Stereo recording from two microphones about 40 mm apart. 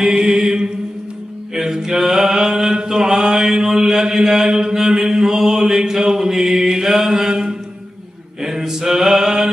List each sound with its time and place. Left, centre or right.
0.0 s mantra: centre